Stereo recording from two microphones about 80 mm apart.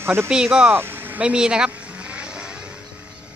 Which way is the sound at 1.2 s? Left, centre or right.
Centre.